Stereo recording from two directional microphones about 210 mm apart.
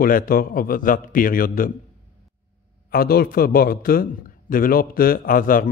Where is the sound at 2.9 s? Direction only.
45° left (ahead or behind).